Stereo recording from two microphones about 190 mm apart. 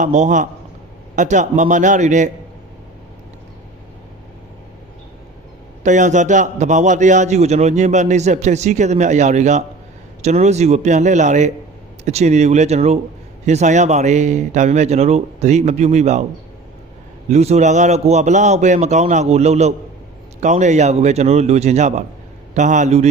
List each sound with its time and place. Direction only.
0.0 s a man's voice: 40° right (ahead or behind)
5.8 s a man's voice: 40° right (ahead or behind)
17.2 s a man's voice: 35° right (ahead or behind)